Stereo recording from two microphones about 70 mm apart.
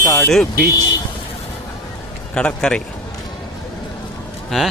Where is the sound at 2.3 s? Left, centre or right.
Centre.